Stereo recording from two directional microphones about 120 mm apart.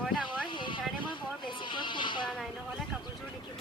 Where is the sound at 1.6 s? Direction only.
40° left (ahead or behind).